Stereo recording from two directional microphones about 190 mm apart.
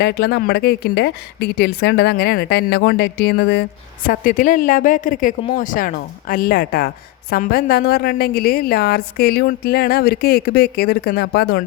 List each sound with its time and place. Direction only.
0.0 s a woman's voice: 60° left (ahead or behind)
4.0 s speech: 45° left (ahead or behind)